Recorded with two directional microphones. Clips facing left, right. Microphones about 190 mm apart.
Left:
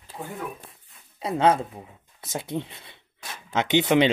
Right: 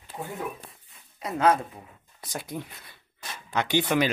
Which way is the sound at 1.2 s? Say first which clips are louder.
Left 2 dB; 30° left (ahead or behind).